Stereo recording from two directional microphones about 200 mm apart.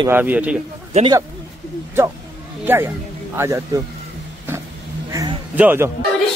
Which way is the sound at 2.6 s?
10° right (ahead or behind).